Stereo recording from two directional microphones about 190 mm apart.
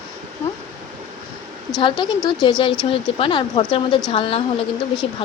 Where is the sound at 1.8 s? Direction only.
25° left (ahead or behind).